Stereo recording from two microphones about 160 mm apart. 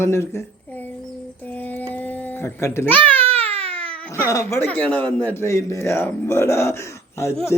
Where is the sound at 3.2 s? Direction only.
35° right (ahead or behind).